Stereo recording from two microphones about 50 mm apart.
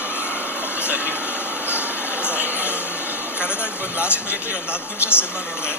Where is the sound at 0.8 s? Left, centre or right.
Right.